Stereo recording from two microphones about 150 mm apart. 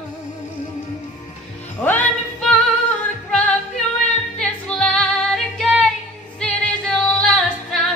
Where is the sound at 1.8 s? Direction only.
10° left (ahead or behind).